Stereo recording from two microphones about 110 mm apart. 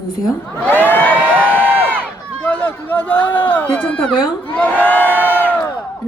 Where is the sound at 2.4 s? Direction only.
10° left (ahead or behind).